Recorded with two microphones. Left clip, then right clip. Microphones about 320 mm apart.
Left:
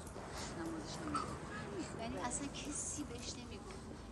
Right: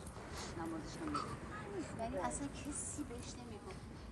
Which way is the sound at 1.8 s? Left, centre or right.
Right.